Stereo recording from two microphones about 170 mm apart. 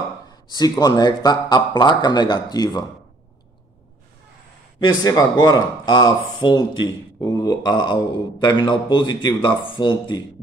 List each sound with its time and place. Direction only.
0.5 s speech: 25° left (ahead or behind)
4.7 s speech: 25° left (ahead or behind)